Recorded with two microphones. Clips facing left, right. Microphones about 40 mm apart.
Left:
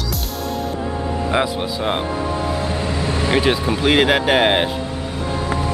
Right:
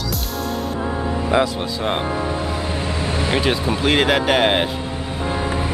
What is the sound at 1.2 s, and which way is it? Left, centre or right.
Speech, centre.